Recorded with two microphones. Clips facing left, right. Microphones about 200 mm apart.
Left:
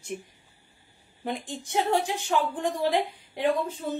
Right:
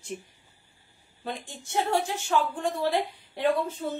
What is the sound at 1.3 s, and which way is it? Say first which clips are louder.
A woman's voice: left 4 dB; 15° left (ahead or behind).